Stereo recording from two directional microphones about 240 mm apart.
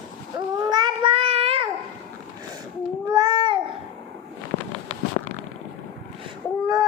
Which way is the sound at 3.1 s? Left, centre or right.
Centre.